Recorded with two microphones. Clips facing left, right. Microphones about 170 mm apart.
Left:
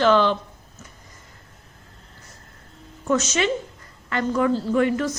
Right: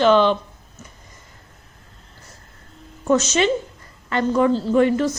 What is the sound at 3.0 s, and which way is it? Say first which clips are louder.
A woman's voice: right 4 dB; 30° right (ahead or behind).